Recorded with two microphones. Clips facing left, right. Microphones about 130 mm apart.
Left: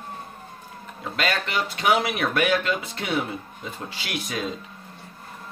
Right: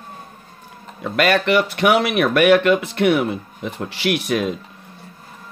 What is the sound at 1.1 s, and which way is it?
Speech, 65° right (ahead or behind).